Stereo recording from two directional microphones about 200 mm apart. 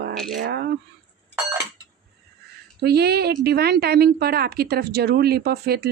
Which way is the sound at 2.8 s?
55° right (ahead or behind).